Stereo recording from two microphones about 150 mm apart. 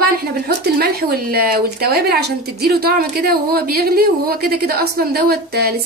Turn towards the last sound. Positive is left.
turn(degrees=-90)